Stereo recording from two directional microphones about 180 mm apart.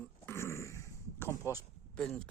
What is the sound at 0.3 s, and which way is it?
Dog, 15° left (ahead or behind).